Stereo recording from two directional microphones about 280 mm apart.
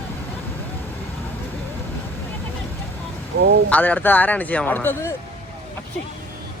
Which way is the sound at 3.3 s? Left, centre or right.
Right.